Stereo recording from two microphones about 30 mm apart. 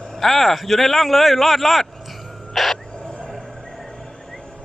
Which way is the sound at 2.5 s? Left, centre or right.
Centre.